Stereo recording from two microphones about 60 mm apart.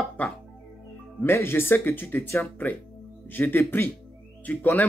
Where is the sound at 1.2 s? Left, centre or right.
Left.